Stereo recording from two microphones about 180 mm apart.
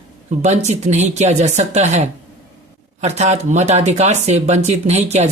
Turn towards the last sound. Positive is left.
turn(degrees=-40)  # may be behind; listen again after turning